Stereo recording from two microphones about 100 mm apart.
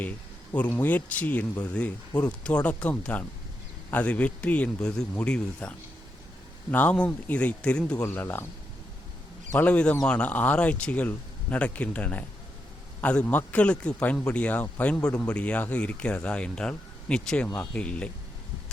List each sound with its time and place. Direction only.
0.5 s speech: 15° left (ahead or behind)
8.0 s speech: 20° left (ahead or behind)
9.5 s speech: 15° left (ahead or behind)